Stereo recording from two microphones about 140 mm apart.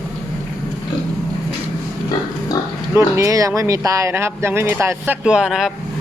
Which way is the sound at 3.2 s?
25° right (ahead or behind).